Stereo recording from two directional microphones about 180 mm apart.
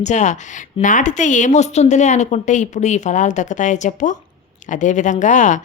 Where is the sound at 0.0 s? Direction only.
40° left (ahead or behind).